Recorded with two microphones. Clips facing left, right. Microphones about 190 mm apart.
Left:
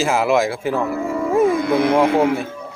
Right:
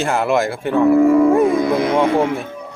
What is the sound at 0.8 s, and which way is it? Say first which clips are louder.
Speech: right 11 dB; 65° right (ahead or behind).